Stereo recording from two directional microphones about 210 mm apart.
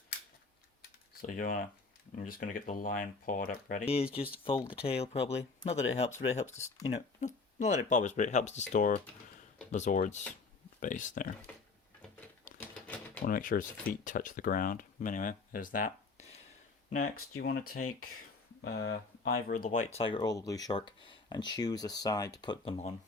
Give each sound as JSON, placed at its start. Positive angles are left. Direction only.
{"t": 1.2, "sound": "speech", "side_deg": 40}
{"t": 12.5, "sound": "typewriter", "side_deg": 40}
{"t": 13.2, "sound": "speech", "side_deg": 40}
{"t": 18.6, "sound": "speech", "side_deg": 55}